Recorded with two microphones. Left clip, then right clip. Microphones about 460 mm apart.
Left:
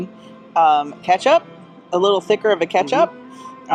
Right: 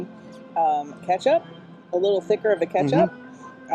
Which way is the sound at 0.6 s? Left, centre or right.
Left.